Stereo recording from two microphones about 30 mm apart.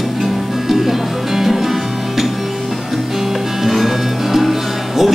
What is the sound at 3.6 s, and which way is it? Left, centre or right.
Music, centre.